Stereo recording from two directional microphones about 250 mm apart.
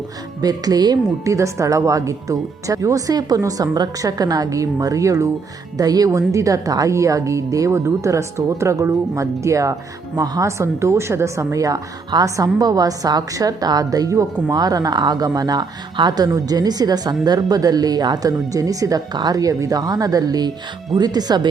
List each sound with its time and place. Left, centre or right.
0.4 s a woman's voice: centre